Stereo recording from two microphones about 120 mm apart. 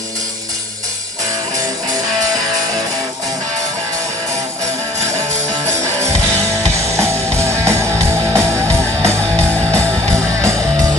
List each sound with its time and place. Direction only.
5.9 s music: 25° right (ahead or behind)